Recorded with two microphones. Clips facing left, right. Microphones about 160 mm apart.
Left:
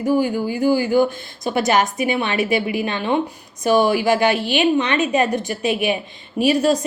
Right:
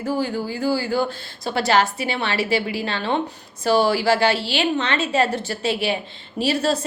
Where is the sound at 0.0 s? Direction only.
15° left (ahead or behind).